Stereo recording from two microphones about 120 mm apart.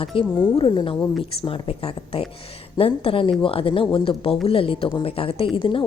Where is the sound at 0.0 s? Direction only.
50° left (ahead or behind).